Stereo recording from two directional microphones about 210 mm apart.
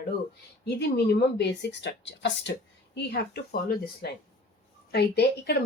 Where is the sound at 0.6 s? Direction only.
50° left (ahead or behind).